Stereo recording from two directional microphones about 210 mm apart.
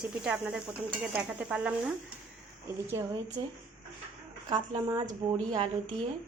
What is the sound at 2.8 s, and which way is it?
Speech, 10° right (ahead or behind).